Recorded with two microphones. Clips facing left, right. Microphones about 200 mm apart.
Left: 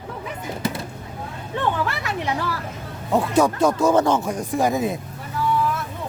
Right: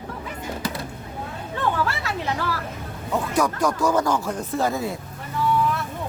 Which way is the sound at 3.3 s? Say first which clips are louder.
Left 4 dB; 25° left (ahead or behind).